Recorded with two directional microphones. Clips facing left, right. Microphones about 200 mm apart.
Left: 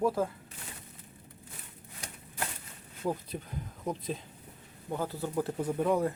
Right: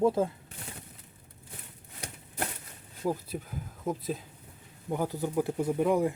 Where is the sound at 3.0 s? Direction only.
5° right (ahead or behind).